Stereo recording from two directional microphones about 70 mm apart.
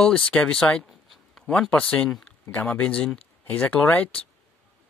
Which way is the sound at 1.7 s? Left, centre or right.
Centre.